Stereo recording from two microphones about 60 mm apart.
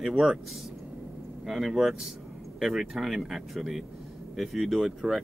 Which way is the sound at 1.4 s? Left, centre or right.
Centre.